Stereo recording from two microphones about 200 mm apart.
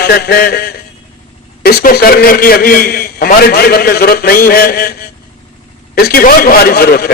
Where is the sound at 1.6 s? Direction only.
50° left (ahead or behind).